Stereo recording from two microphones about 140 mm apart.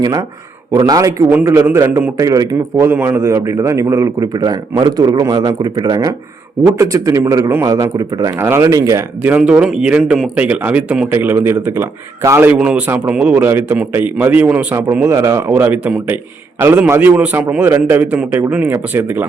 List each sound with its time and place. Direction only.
0.0 s a man's voice: 30° right (ahead or behind)
1.3 s a man's voice: 15° right (ahead or behind)
9.2 s speech: 10° right (ahead or behind)